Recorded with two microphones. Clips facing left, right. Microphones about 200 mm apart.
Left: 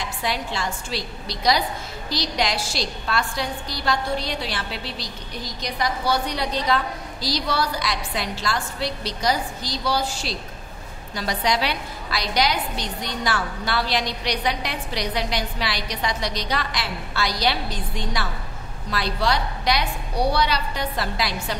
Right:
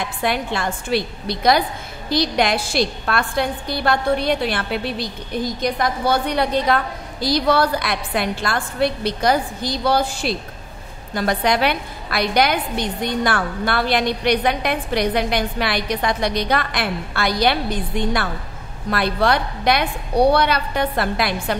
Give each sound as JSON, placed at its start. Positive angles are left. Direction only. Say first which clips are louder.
{"t": 0.0, "sound": "a woman's voice", "louder": "right 5 dB", "side_deg": -55}